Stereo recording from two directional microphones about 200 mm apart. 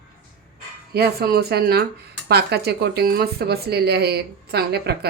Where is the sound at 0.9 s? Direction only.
50° right (ahead or behind).